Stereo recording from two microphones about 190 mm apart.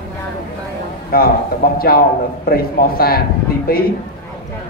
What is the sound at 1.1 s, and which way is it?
A man's voice, 50° left (ahead or behind).